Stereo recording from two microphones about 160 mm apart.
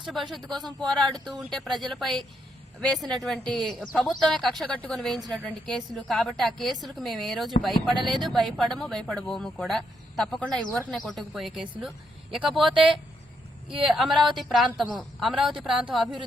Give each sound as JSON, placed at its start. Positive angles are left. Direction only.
{"t": 0.0, "sound": "speech", "side_deg": 0}
{"t": 13.9, "sound": "speech", "side_deg": 0}